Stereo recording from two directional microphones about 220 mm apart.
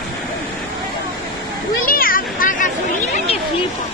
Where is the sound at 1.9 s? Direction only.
40° left (ahead or behind).